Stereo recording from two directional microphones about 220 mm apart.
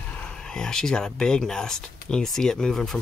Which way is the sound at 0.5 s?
5° left (ahead or behind).